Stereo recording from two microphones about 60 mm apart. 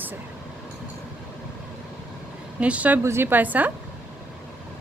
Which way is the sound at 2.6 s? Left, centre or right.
Right.